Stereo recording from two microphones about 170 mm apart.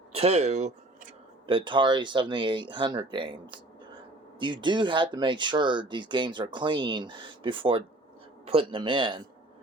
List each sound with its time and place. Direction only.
0.1 s speech: 35° right (ahead or behind)
1.5 s speech: 30° right (ahead or behind)